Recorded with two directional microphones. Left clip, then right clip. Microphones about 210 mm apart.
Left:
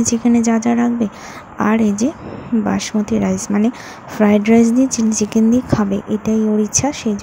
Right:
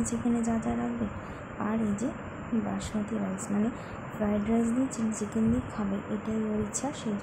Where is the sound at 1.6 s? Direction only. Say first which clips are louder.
Left 16 dB; 45° left (ahead or behind).